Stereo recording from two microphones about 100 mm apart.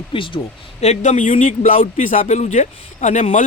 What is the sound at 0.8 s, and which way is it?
Speech, 90° left.